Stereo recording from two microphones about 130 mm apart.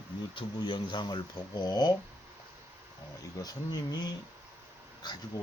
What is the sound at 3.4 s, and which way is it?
Speech, 30° left (ahead or behind).